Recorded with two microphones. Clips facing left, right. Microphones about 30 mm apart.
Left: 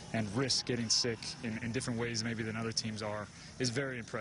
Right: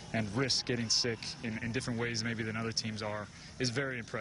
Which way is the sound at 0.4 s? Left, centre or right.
Centre.